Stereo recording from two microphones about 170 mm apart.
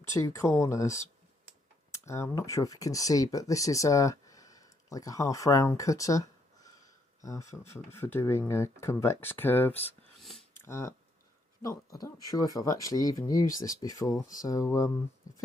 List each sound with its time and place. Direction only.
0.1 s speech: 20° left (ahead or behind)
10.2 s a sound: centre (ahead or behind)
10.6 s speech: 15° left (ahead or behind)